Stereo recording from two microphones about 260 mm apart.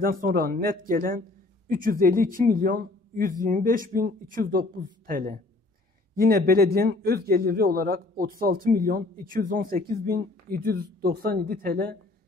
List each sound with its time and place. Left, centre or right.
0.0 s a man's voice: right